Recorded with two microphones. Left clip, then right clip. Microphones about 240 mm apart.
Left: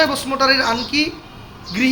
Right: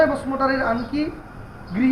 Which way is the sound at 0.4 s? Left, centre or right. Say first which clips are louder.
Left 6 dB; left.